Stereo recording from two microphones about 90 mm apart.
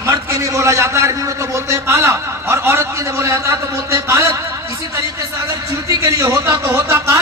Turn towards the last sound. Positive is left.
turn(degrees=-30)  # may be behind; listen again after turning